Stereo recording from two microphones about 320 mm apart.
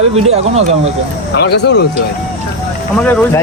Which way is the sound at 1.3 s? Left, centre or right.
Left.